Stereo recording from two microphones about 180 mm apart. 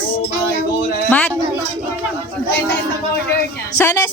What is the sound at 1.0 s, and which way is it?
Speech, 10° left (ahead or behind).